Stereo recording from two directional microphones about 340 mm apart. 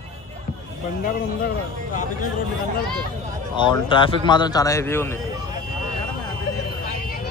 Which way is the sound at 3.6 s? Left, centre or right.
Centre.